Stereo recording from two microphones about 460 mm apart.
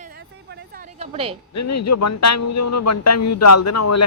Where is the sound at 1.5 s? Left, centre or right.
Left.